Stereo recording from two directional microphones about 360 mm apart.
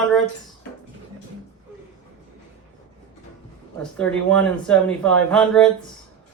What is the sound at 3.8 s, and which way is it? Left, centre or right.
Speech, centre.